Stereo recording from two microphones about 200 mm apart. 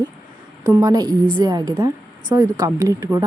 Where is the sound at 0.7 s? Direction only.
15° right (ahead or behind).